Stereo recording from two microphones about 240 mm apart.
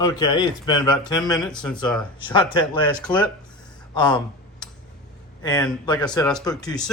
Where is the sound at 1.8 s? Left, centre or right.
Centre.